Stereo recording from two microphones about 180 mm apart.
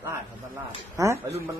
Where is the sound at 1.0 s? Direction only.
20° right (ahead or behind).